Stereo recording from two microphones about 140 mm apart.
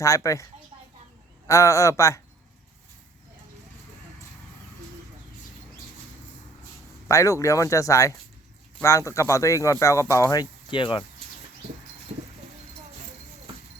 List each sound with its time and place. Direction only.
0.0 s speech: 20° left (ahead or behind)
1.5 s speech: 20° left (ahead or behind)
7.1 s speech: 20° left (ahead or behind)